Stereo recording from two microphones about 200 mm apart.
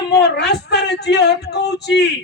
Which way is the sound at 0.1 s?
55° left (ahead or behind).